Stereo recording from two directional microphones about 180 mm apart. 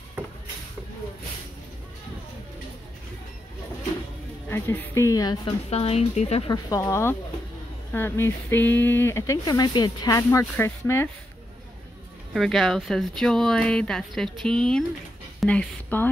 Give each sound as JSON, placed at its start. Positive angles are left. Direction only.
{"t": 4.5, "sound": "speech", "side_deg": 10}
{"t": 5.7, "sound": "speech", "side_deg": 35}
{"t": 6.5, "sound": "speech", "side_deg": 15}
{"t": 12.4, "sound": "speech", "side_deg": 0}